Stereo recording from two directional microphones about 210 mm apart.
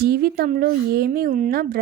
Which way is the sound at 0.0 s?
45° right (ahead or behind).